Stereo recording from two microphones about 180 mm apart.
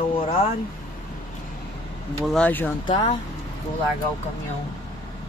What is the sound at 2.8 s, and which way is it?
Speech, 20° left (ahead or behind).